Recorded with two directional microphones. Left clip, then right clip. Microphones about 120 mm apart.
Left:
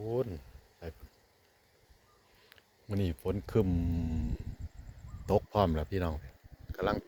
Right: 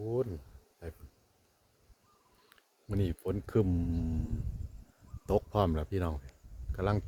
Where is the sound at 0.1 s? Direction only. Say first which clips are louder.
Even; 25° right (ahead or behind).